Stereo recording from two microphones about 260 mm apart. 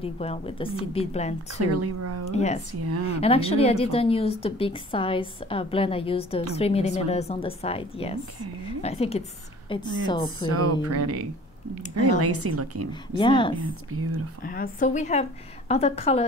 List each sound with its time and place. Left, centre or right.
0.0 s speech: left
1.6 s speech: right
2.3 s a woman's voice: left
10.5 s speech: right
12.9 s a woman's voice: centre
13.9 s speech: right
14.4 s speech: left